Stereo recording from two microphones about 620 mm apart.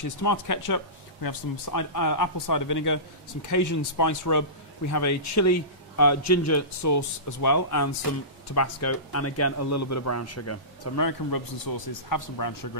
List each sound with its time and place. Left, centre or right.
0.0 s a man's voice: left